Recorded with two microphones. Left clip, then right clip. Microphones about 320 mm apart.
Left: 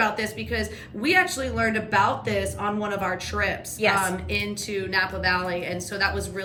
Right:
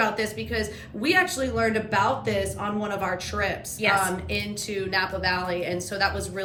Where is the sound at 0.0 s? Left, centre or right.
Centre.